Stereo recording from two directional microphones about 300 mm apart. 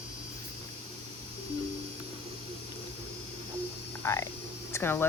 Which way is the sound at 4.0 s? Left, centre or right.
Centre.